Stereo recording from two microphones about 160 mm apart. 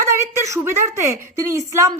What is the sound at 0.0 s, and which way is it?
A woman's voice, 15° right (ahead or behind).